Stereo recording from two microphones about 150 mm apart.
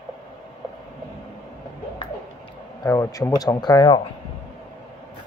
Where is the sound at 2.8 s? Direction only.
20° left (ahead or behind).